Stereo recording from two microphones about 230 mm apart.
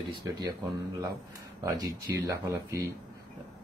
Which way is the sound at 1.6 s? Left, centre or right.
Centre.